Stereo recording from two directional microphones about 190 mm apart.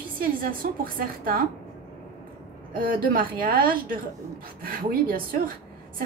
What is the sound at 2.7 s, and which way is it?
A woman's voice, 50° right (ahead or behind).